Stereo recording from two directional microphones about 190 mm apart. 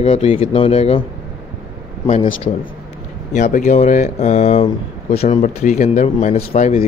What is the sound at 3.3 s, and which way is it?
Speech, 40° left (ahead or behind).